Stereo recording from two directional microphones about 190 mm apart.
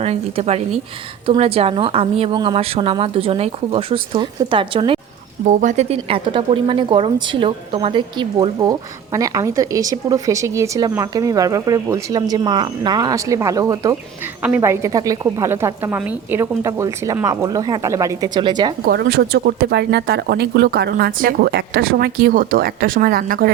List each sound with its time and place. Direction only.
0.0 s speech: 35° right (ahead or behind)
5.5 s a woman's voice: 40° right (ahead or behind); by 18.7 s 25° right (ahead or behind)
18.9 s speech: 55° right (ahead or behind)